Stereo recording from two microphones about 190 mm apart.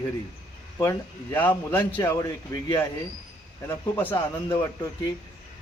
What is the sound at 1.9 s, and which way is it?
Speech, 20° left (ahead or behind).